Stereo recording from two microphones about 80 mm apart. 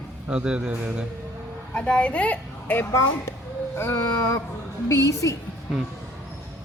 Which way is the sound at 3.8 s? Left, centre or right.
Left.